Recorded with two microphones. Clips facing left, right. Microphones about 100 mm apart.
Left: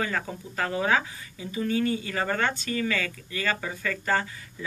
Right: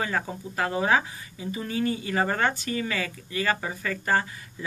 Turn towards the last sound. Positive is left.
turn(degrees=-20)  # may be behind; listen again after turning